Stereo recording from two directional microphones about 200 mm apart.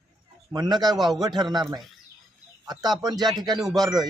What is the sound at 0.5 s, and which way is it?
Speech, 20° right (ahead or behind).